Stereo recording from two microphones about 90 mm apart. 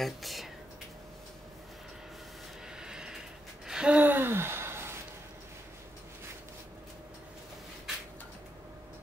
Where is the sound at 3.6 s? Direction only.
10° right (ahead or behind); by 4.9 s 25° right (ahead or behind).